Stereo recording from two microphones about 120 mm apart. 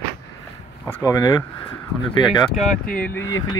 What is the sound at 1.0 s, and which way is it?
Speech, 30° left (ahead or behind).